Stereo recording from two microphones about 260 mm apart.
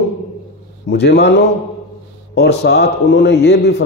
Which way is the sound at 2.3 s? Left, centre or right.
Left.